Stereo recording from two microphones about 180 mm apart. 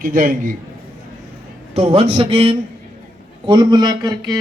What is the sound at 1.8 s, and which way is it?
A man's voice, 35° right (ahead or behind).